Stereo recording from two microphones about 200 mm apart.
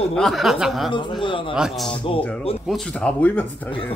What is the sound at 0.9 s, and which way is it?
Speech, 25° left (ahead or behind).